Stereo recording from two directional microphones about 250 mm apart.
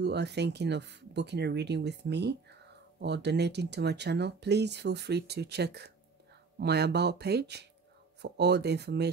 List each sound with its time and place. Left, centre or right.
0.0 s speech: right